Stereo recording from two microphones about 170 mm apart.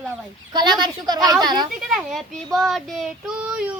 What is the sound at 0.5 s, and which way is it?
A woman's voice, 25° right (ahead or behind).